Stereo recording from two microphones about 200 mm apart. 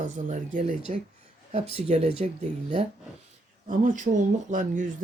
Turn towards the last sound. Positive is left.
turn(degrees=-40)  # may be behind; listen again after turning